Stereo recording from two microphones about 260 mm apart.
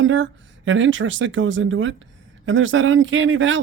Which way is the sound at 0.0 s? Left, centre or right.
Right.